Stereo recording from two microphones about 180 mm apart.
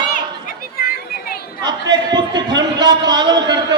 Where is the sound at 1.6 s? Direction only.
25° right (ahead or behind).